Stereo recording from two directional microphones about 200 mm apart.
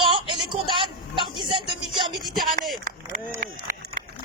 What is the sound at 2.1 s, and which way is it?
Speech, centre (ahead or behind).